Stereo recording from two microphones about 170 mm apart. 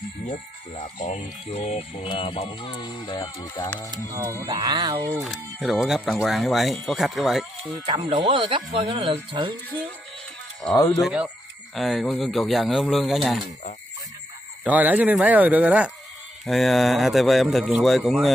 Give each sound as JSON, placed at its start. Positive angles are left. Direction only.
{"t": 0.3, "sound": "speech", "side_deg": 25}
{"t": 1.0, "sound": "speech", "side_deg": 40}
{"t": 4.1, "sound": "speech", "side_deg": -15}
{"t": 4.5, "sound": "speech", "side_deg": -30}
{"t": 5.2, "sound": "speech", "side_deg": 0}
{"t": 7.8, "sound": "speech", "side_deg": -30}
{"t": 11.0, "sound": "speech", "side_deg": -5}
{"t": 14.6, "sound": "speech", "side_deg": -10}